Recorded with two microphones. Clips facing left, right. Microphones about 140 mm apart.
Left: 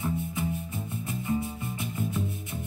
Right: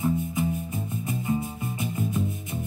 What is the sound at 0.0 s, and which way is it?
Music, 20° right (ahead or behind).